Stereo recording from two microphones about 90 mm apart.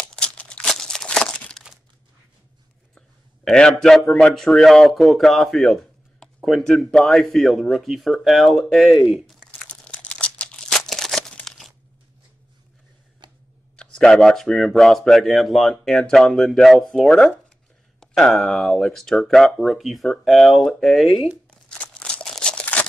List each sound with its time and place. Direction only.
0.0 s crumpling: 15° left (ahead or behind)
3.4 s a man's voice: 5° left (ahead or behind)
10.7 s crumpling: 5° left (ahead or behind)
13.2 s a sound: 55° right (ahead or behind)
13.7 s speech: 10° left (ahead or behind)
21.5 s a sound: 10° left (ahead or behind)